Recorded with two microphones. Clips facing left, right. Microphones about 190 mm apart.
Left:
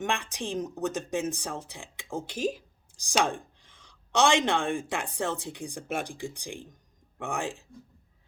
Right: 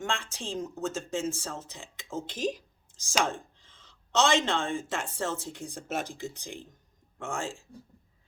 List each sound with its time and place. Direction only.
0.0 s speech: 15° left (ahead or behind)
2.9 s chopping: 15° left (ahead or behind)
3.2 s speech: 15° left (ahead or behind)